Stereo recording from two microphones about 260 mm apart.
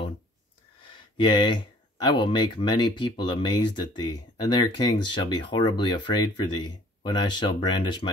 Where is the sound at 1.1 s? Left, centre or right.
Centre.